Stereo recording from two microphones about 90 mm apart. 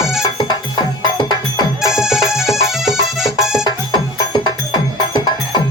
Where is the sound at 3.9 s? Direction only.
50° left (ahead or behind).